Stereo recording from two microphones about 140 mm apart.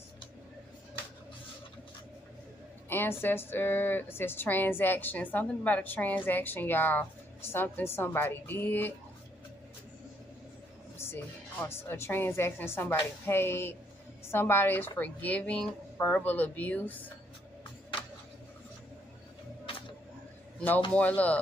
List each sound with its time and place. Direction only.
2.9 s a woman's voice: 15° left (ahead or behind)
11.0 s a woman's voice: 15° left (ahead or behind)
20.5 s a man's voice: 10° left (ahead or behind)